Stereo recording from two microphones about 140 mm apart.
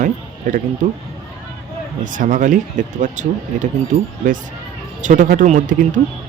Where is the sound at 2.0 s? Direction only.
70° right (ahead or behind).